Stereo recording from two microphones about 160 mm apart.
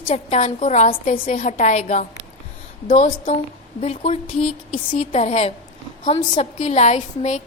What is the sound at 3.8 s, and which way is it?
A woman's voice, 40° left (ahead or behind).